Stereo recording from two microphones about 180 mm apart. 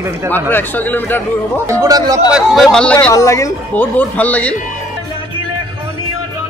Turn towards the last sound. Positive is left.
turn(degrees=10)  # may be behind; listen again after turning